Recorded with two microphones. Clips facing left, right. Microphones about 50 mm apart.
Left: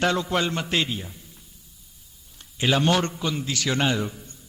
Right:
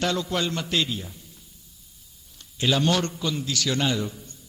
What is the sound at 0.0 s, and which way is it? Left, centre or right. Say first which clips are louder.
A man's voice: left 3 dB; left.